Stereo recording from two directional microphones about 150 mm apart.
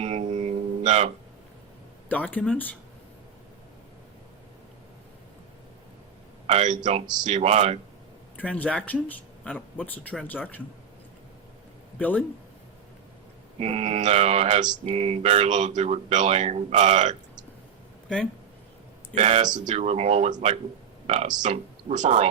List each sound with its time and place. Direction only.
0.0 s a sound: 50° right (ahead or behind)
2.0 s speech: 10° left (ahead or behind)
6.5 s speech: 55° right (ahead or behind)
8.4 s speech: 10° left (ahead or behind)
11.9 s speech: 10° left (ahead or behind)
13.6 s speech: 45° right (ahead or behind)
19.1 s speech: 50° right (ahead or behind)
21.4 s speech: 55° right (ahead or behind)